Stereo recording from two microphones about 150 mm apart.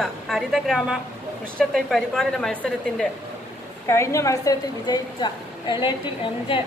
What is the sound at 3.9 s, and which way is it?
A woman's voice, 20° left (ahead or behind).